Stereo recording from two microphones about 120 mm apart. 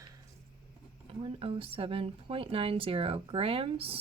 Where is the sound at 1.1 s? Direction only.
50° right (ahead or behind).